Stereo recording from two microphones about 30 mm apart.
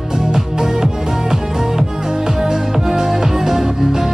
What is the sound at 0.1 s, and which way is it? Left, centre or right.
Music, centre.